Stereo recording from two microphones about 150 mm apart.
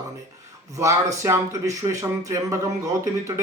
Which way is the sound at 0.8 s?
20° right (ahead or behind).